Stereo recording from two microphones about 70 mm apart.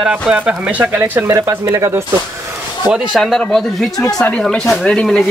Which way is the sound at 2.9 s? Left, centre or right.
Centre.